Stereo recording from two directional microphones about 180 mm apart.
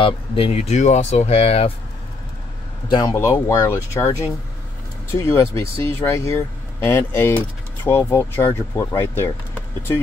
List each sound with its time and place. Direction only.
0.0 s speech: 30° left (ahead or behind)
2.9 s speech: 20° left (ahead or behind)